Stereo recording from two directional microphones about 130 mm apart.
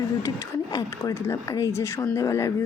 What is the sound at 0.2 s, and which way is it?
A woman's voice, 30° left (ahead or behind).